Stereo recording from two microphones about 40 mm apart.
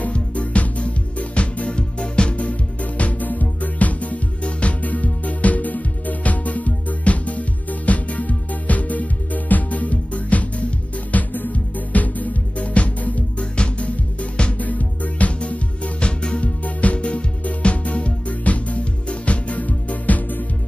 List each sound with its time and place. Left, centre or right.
0.1 s music: left
14.6 s music: left
16.4 s music: left